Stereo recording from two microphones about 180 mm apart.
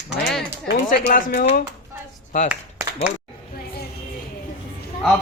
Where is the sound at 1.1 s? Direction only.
50° left (ahead or behind).